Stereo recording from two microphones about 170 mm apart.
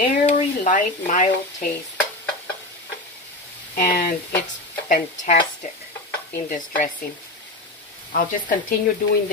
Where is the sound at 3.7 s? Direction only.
55° left (ahead or behind).